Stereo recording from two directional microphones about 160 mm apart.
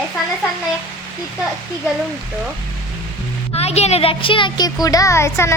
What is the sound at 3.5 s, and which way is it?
A woman's voice, 40° left (ahead or behind).